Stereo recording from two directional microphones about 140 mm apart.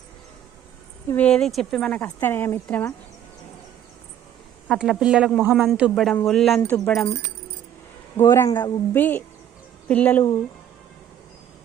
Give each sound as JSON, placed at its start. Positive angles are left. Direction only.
{"t": 1.1, "sound": "speech", "side_deg": 10}
{"t": 4.7, "sound": "a man's voice", "side_deg": -5}
{"t": 6.6, "sound": "speech", "side_deg": 15}
{"t": 8.1, "sound": "speech", "side_deg": 20}